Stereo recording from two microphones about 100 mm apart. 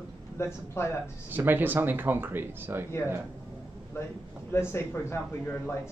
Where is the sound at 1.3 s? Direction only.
20° right (ahead or behind).